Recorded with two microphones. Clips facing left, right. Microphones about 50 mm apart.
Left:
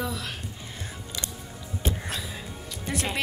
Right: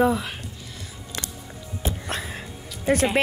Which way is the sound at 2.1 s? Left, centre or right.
Right.